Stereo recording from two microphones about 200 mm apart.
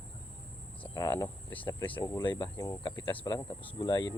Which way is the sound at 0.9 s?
15° left (ahead or behind).